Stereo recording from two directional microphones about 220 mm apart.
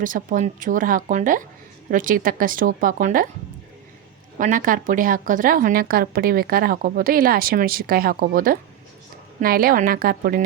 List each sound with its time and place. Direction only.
0.0 s a woman's voice: 35° right (ahead or behind)
4.4 s a woman's voice: 35° right (ahead or behind)